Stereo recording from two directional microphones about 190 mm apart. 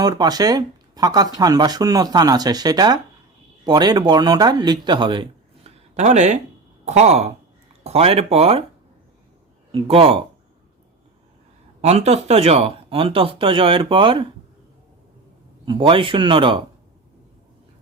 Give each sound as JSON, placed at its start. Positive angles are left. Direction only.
{"t": 0.0, "sound": "speech", "side_deg": -20}
{"t": 9.7, "sound": "speech", "side_deg": -30}
{"t": 11.8, "sound": "speech", "side_deg": -35}
{"t": 15.6, "sound": "speech", "side_deg": -25}